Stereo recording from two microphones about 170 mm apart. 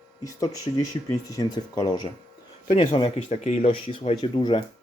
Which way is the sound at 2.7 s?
35° left (ahead or behind).